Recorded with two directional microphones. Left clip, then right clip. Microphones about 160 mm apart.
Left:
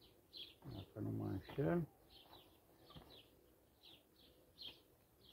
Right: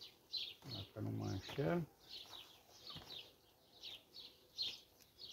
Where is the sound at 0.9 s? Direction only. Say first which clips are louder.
Left 3 dB; 10° right (ahead or behind).